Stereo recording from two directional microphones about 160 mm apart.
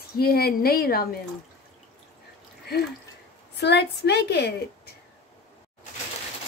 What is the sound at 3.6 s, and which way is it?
Speech, 90° left.